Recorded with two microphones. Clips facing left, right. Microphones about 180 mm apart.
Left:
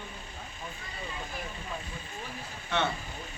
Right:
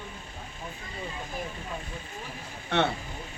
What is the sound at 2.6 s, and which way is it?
Speech, 60° right (ahead or behind).